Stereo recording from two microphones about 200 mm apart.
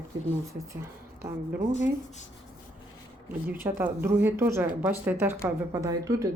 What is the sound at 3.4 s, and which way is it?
Speech, 10° right (ahead or behind).